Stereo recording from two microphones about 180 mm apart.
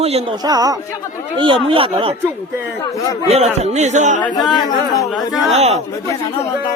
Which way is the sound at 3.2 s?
35° right (ahead or behind).